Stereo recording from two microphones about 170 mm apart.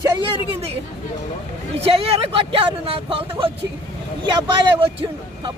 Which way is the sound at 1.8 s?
35° right (ahead or behind).